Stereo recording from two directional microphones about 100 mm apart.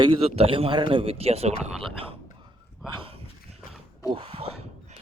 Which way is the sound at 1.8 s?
65° right (ahead or behind).